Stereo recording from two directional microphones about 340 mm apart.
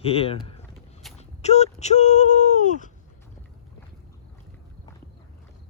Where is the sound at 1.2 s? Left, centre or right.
Centre.